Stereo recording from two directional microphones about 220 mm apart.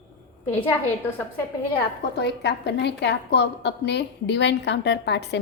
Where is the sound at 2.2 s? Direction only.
50° left (ahead or behind).